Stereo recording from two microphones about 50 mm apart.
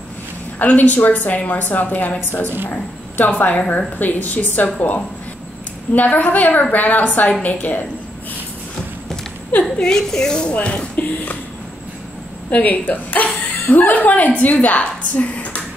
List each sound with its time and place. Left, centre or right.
0.6 s a woman's voice: left
9.5 s a woman's voice: left
9.8 s speech: centre
12.4 s a woman's voice: left